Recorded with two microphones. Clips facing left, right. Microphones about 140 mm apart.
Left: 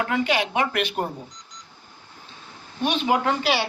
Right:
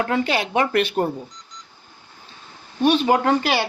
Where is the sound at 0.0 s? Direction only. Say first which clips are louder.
Right 2 dB; 40° right (ahead or behind).